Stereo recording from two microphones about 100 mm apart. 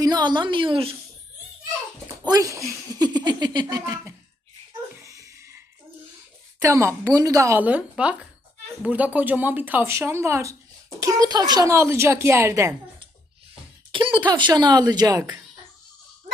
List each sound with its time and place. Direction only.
0.0 s speech: 45° right (ahead or behind); by 0.9 s 60° right (ahead or behind)
2.2 s speech: 35° right (ahead or behind)
3.8 s speech: 25° right (ahead or behind)
5.0 s a sound: 30° right (ahead or behind)
6.7 s a woman's voice: 30° right (ahead or behind)
7.6 s a woman's voice: 15° right (ahead or behind); by 11.7 s 40° right (ahead or behind)
11.7 s speech: 30° right (ahead or behind)
13.9 s speech: 55° right (ahead or behind); by 15.2 s 40° right (ahead or behind)